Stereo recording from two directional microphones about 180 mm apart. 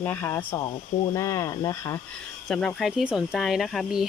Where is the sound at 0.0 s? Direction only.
10° left (ahead or behind).